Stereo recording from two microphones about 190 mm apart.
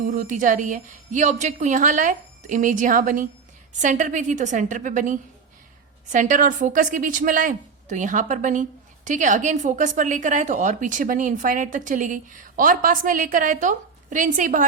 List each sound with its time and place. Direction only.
0.0 s a woman's voice: 40° right (ahead or behind)